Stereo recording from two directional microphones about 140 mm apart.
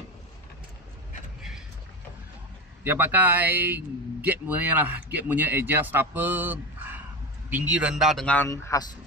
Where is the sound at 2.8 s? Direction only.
15° right (ahead or behind); by 8.5 s 10° left (ahead or behind).